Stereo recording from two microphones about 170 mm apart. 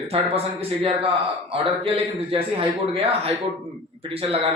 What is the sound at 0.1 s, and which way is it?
Speech, 35° right (ahead or behind).